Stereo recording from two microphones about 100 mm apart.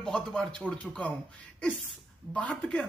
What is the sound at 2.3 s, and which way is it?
Speech, 10° left (ahead or behind).